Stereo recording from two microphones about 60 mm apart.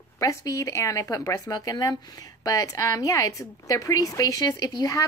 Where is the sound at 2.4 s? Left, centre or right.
Left.